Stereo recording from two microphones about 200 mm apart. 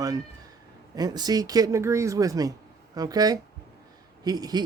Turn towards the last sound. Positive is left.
turn(degrees=-20)  # may be behind; listen again after turning